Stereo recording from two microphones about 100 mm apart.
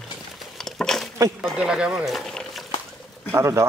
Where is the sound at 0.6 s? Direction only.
5° left (ahead or behind).